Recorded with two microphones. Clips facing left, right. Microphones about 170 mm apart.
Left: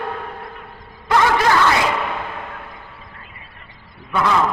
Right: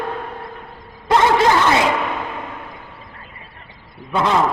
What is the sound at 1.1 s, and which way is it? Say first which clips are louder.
Snicker: right 2 dB; 25° right (ahead or behind).